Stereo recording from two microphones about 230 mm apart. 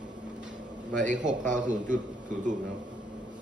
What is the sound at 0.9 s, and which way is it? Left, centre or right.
A man's voice, right.